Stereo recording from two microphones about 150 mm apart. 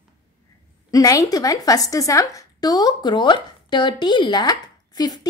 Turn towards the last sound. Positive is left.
turn(degrees=25)  # may be behind; listen again after turning